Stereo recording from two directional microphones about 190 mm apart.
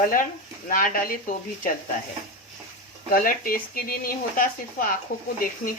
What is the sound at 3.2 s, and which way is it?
Speech, 50° left (ahead or behind).